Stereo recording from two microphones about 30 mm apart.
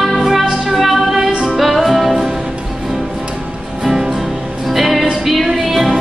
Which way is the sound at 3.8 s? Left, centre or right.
Centre.